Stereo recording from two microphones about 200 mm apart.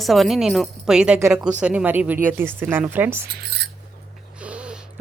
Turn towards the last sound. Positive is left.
turn(degrees=-5)  # may be behind; listen again after turning